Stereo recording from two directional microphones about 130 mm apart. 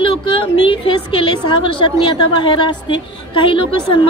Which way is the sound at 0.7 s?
40° left (ahead or behind).